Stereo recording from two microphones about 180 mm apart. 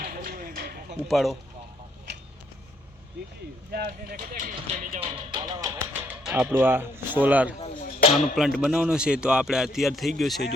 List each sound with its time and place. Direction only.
0.0 s a sound: 55° right (ahead or behind)
1.0 s speech: centre (ahead or behind)
3.7 s speech: 55° right (ahead or behind)
4.9 s speech: 25° right (ahead or behind); by 10.4 s centre (ahead or behind)